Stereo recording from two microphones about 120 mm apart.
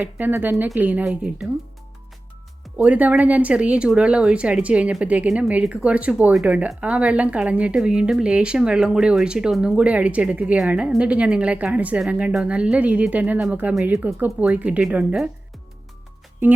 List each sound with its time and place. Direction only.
0.0 s speech: 15° right (ahead or behind)
2.7 s speech: 10° right (ahead or behind)